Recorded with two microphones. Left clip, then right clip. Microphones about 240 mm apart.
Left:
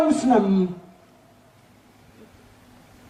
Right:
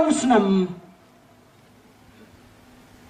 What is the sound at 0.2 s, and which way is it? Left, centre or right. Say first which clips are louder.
Speech: right 1 dB; centre.